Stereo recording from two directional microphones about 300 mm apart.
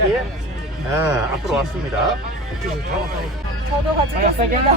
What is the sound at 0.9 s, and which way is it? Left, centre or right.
Speech, centre.